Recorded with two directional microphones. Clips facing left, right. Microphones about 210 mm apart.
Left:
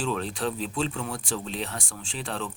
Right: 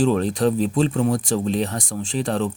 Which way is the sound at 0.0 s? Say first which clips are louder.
Right 10 dB; 40° right (ahead or behind).